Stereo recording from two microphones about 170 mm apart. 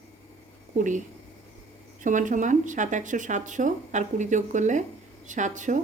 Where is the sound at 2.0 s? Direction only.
50° right (ahead or behind).